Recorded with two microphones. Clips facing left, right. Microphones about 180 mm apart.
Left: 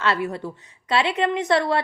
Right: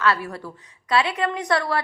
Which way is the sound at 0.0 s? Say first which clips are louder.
Even; 25° left (ahead or behind).